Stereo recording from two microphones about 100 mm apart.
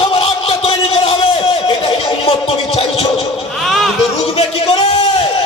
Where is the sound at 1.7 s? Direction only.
75° left (ahead or behind).